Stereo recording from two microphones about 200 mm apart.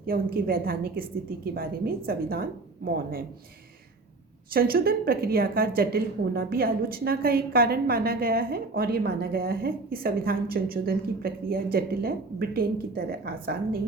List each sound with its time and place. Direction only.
0.0 s a woman's voice: 50° right (ahead or behind)
4.5 s a woman's voice: 50° right (ahead or behind)